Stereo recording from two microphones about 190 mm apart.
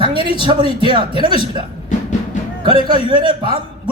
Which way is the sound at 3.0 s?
25° right (ahead or behind).